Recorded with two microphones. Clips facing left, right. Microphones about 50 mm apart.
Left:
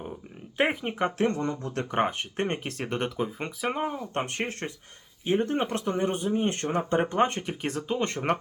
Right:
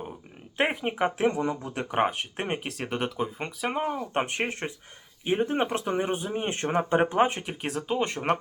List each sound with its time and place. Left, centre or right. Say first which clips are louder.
0.5 s speech: even; centre
4.1 s speech: right 2 dB; centre